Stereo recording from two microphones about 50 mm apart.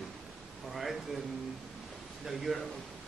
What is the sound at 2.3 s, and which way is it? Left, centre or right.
Speech, centre.